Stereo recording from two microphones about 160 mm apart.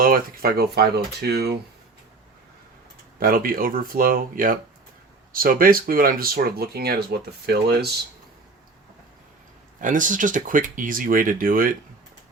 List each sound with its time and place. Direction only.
0.0 s speech: 65° right (ahead or behind); by 1.5 s 90° right
3.2 s speech: 65° right (ahead or behind); by 7.9 s 90° right
9.8 s speech: 55° right (ahead or behind)